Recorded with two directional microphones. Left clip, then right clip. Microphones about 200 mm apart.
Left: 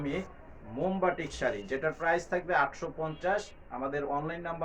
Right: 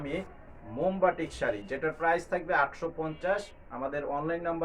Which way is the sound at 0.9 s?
15° right (ahead or behind).